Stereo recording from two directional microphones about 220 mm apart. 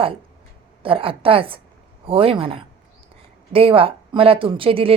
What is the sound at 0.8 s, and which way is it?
Speech, 25° right (ahead or behind).